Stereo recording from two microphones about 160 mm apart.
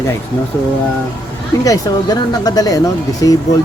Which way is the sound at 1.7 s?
20° left (ahead or behind).